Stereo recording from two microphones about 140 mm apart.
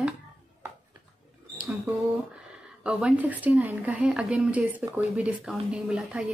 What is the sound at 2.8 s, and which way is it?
Speech, 10° right (ahead or behind).